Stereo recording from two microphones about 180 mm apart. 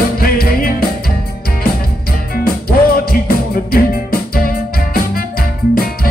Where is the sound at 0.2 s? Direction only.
55° left (ahead or behind).